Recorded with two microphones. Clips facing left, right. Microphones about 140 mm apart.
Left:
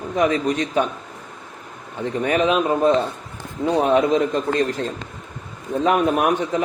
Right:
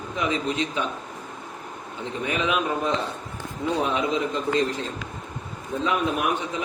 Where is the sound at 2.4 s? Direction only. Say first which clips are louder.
Left 5 dB; 35° left (ahead or behind).